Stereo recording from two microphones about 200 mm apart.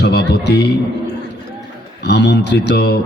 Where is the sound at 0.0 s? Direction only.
55° left (ahead or behind).